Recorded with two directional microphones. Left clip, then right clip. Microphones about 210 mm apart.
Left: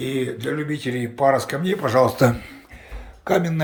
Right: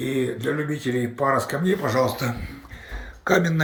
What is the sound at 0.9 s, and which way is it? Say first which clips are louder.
Speech: left 4 dB; 15° left (ahead or behind).